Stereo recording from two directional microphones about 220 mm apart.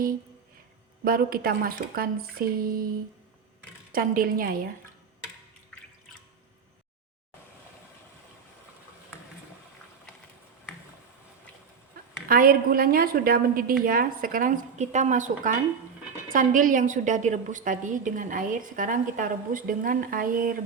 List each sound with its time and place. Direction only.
1.0 s a woman's voice: 40° right (ahead or behind)
3.9 s a woman's voice: 40° right (ahead or behind)
12.3 s a woman's voice: 40° right (ahead or behind)